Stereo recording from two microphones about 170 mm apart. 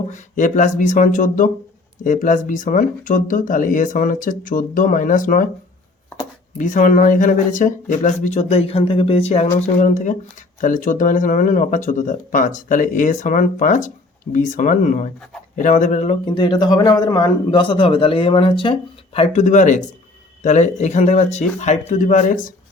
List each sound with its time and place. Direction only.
0.1 s speech: 50° left (ahead or behind)
6.6 s speech: 50° left (ahead or behind)